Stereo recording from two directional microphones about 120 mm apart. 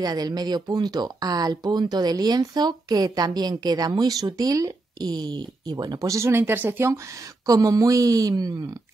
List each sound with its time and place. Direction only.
0.0 s speech: 35° right (ahead or behind); by 7.0 s 20° right (ahead or behind)
7.4 s speech: 30° right (ahead or behind)